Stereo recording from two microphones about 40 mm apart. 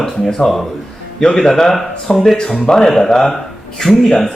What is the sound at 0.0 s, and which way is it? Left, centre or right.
Speech, centre.